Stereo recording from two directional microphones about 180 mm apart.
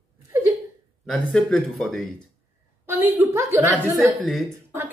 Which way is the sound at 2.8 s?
10° right (ahead or behind).